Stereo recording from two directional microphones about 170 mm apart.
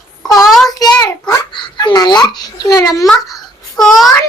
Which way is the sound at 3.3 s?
Centre (ahead or behind).